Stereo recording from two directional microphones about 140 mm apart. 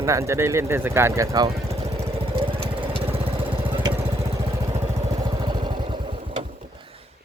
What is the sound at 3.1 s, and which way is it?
Lawn mower, 45° right (ahead or behind).